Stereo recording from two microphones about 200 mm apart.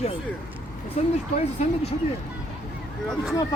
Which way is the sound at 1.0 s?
35° left (ahead or behind).